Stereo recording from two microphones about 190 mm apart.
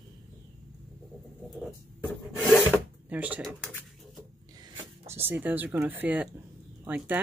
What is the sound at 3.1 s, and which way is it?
Speech, 10° right (ahead or behind).